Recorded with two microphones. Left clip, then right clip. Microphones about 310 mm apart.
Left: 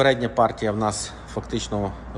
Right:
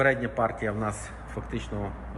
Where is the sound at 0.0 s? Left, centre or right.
Centre.